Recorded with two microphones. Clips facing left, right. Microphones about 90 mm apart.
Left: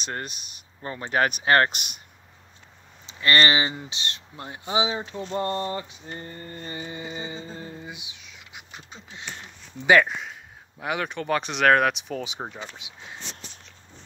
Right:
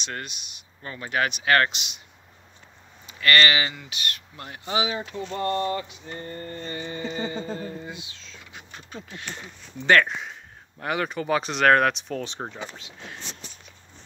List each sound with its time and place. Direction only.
0.0 s speech: 40° left (ahead or behind)
1.7 s speech: 50° left (ahead or behind)
3.1 s speech: 25° left (ahead or behind)
6.3 s a sound: 20° left (ahead or behind)
7.5 s speech: 20° left (ahead or behind)
9.8 s speech: 5° left (ahead or behind)
12.7 s a sound: 15° left (ahead or behind)